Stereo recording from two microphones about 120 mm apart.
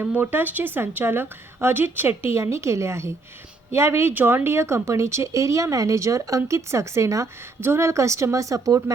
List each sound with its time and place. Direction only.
0.0 s a woman's voice: 15° right (ahead or behind)